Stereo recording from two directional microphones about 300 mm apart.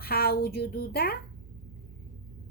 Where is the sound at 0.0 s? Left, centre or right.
Left.